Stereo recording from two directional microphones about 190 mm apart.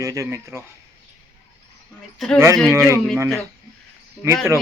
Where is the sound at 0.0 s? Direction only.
15° right (ahead or behind).